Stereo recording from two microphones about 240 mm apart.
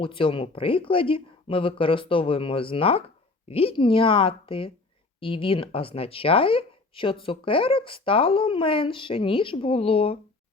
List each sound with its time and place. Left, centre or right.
0.0 s speech: left